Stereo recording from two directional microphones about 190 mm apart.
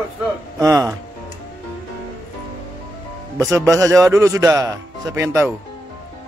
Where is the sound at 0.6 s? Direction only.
20° right (ahead or behind).